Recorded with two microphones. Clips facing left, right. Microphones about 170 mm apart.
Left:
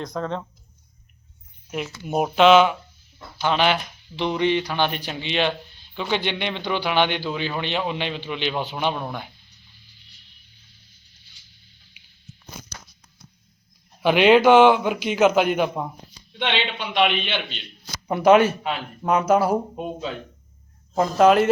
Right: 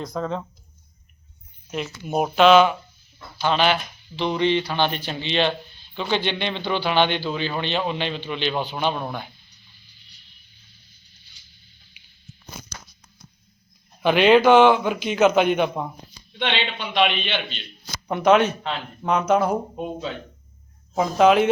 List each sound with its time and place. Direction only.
0.0 s speech: centre (ahead or behind)
1.7 s a man's voice: 15° left (ahead or behind)
14.0 s a man's voice: 5° left (ahead or behind)
16.9 s a man's voice: 10° left (ahead or behind)